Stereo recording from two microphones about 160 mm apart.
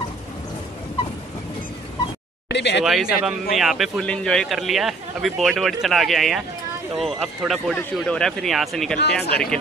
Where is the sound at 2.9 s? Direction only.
Centre (ahead or behind).